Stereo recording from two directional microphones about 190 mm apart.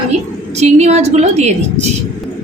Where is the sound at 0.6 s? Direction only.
35° right (ahead or behind).